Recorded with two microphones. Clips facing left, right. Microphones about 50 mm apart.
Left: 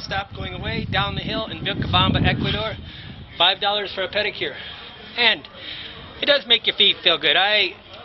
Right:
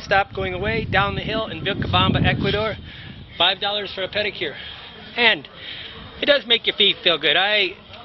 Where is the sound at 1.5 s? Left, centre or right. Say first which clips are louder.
Right 2 dB; right.